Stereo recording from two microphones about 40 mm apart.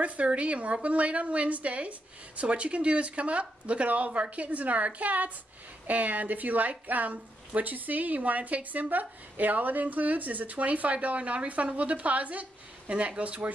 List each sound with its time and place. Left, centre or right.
0.0 s a woman's voice: right